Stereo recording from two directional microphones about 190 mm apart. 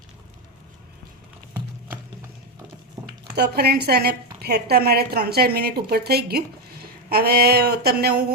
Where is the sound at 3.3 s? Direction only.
55° right (ahead or behind).